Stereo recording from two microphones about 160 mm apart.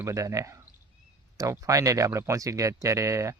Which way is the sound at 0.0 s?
20° right (ahead or behind).